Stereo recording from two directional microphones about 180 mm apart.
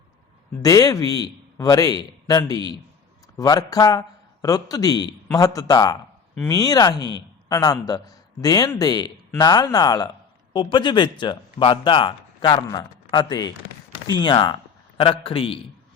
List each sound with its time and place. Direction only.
0.6 s speech: 20° left (ahead or behind)